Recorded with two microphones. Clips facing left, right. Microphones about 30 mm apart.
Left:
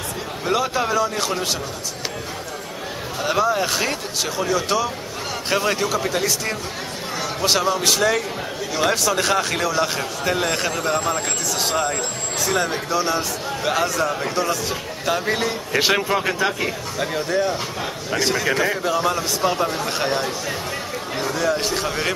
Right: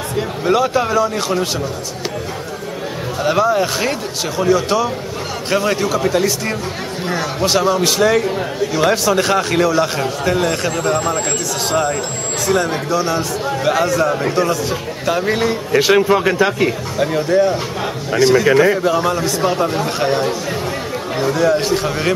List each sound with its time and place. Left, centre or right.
0.5 s a man's voice: centre
3.2 s a man's voice: centre
16.3 s a man's voice: right
17.0 s a man's voice: centre